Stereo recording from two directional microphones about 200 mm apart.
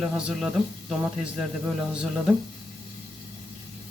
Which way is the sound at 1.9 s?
5° right (ahead or behind).